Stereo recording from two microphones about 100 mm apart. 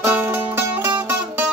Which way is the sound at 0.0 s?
20° right (ahead or behind).